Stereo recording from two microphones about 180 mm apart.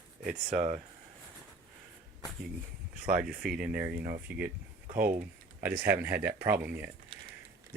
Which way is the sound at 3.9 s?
55° right (ahead or behind).